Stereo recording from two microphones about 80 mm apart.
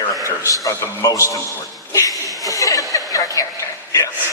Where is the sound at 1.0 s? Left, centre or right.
Left.